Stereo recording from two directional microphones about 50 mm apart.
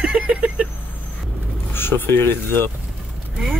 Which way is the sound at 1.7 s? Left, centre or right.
Left.